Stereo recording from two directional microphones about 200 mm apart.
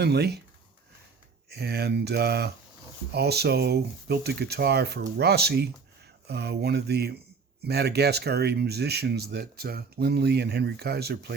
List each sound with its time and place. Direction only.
0.0 s speech: 55° right (ahead or behind)
1.5 s speech: 55° right (ahead or behind)